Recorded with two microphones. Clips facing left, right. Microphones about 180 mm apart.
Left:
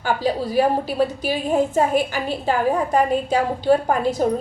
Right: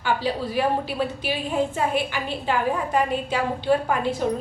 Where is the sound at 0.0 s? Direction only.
40° left (ahead or behind).